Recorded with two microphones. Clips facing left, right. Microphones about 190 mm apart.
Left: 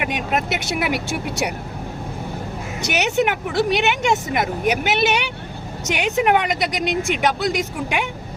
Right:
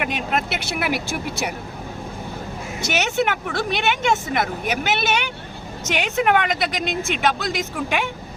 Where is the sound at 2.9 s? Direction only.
15° left (ahead or behind).